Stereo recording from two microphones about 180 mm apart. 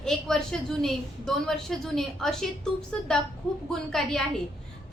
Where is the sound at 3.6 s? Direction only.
5° left (ahead or behind).